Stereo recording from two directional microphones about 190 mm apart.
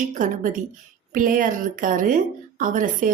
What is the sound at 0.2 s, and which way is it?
A woman's voice, 45° right (ahead or behind).